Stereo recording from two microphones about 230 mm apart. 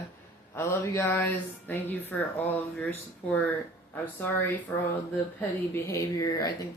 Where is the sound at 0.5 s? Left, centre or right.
Centre.